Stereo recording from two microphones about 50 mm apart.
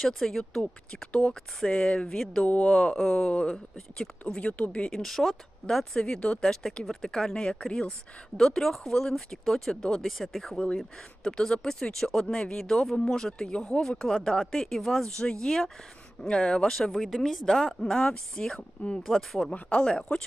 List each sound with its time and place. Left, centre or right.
0.0 s speech: centre
2.0 s speech: centre
10.0 s speech: centre
17.8 s speech: centre
19.0 s speech: centre
19.5 s speech: centre